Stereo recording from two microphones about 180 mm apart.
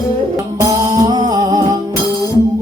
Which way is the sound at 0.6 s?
20° right (ahead or behind).